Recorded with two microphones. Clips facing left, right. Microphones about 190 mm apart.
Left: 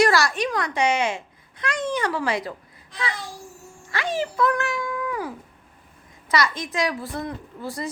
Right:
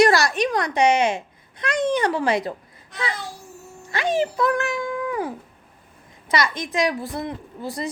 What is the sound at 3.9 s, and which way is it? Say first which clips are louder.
A child's voice: right 4 dB; 20° right (ahead or behind).